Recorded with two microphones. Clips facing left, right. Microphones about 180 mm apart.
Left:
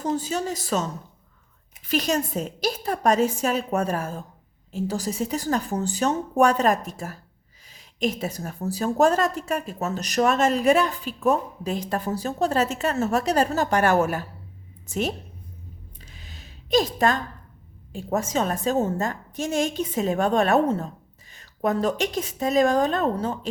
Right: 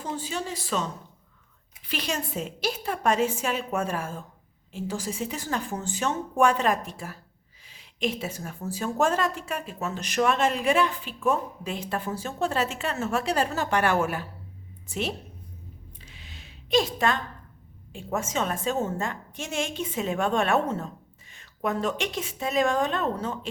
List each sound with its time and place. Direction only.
0.0 s a woman's voice: 40° left (ahead or behind)
1.9 s a woman's voice: 40° left (ahead or behind)
16.1 s a sound: 40° left (ahead or behind)
17.9 s a woman's voice: 35° left (ahead or behind)